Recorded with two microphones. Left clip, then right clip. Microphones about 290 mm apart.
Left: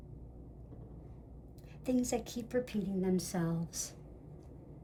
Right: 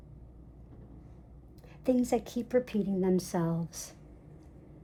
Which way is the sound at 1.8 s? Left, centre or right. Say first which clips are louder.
Right 6 dB; right.